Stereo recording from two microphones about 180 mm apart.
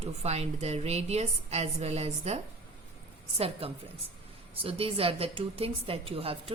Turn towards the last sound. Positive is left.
turn(degrees=-30)  # may be behind; listen again after turning